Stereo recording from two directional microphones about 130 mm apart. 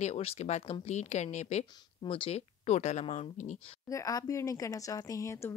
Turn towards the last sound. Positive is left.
turn(degrees=25)  # may be behind; listen again after turning